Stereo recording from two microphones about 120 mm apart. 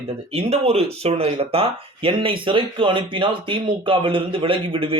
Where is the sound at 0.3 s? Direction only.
60° right (ahead or behind).